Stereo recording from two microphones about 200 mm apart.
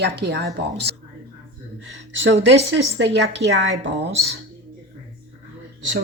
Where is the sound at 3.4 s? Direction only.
15° right (ahead or behind).